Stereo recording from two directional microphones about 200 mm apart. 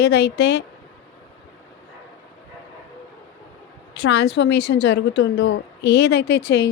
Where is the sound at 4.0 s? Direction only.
60° left (ahead or behind).